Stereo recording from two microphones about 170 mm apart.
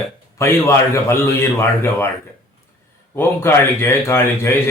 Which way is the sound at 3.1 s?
15° left (ahead or behind).